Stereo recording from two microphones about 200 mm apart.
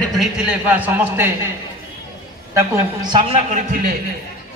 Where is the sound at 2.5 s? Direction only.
20° right (ahead or behind).